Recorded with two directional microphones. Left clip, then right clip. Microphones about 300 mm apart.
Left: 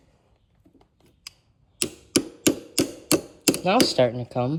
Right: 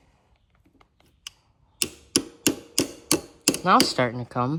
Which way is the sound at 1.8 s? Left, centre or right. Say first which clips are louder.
Left 1 dB; centre.